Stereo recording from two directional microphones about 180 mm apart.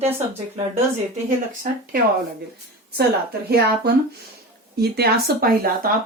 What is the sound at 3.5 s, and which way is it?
Speech, 60° right (ahead or behind).